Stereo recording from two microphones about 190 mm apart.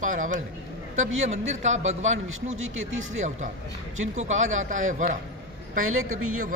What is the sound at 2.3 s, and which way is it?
Speech, 90° right.